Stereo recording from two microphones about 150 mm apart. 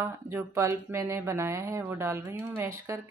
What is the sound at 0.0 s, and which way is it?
Speech, 15° right (ahead or behind).